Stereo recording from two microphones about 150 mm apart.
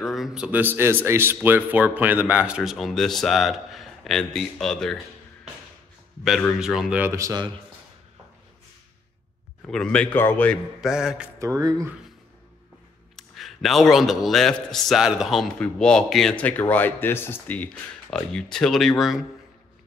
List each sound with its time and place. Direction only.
0.0 s speech: centre (ahead or behind)
6.2 s speech: centre (ahead or behind)
7.0 s speech: 20° right (ahead or behind)
9.7 s a man's voice: 5° left (ahead or behind)
10.8 s speech: 5° right (ahead or behind)
11.3 s speech: 20° right (ahead or behind)
13.1 s speech: centre (ahead or behind)